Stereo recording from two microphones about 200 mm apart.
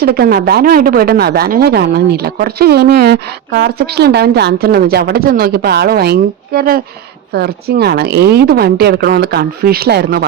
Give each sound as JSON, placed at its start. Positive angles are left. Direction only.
{"t": 0.0, "sound": "speech", "side_deg": -50}